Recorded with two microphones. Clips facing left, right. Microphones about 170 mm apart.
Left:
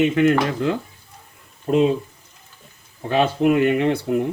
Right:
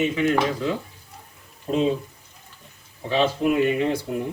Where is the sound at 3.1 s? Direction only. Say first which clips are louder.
Left 3 dB; 60° left (ahead or behind).